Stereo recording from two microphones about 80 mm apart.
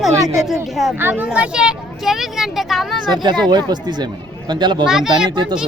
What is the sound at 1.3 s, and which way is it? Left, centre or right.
Speech, centre.